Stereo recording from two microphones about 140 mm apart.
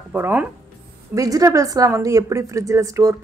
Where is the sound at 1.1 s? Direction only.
25° right (ahead or behind).